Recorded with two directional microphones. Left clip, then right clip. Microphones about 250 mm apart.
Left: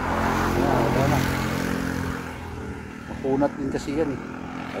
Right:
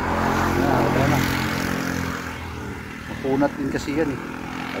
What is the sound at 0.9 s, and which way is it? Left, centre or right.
Vehicle, centre.